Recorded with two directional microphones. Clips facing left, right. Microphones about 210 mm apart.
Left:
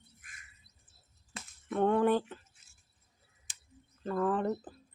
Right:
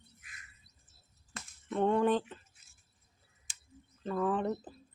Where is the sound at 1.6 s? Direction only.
5° left (ahead or behind).